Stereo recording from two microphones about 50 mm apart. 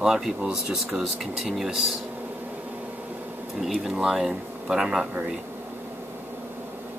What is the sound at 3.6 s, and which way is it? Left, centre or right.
Speech, centre.